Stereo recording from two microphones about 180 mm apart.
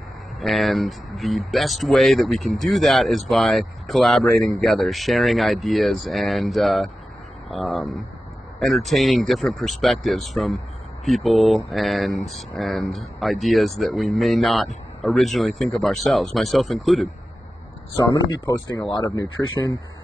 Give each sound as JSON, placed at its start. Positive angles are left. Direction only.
{"t": 0.4, "sound": "speech", "side_deg": 0}
{"t": 17.9, "sound": "speech", "side_deg": 20}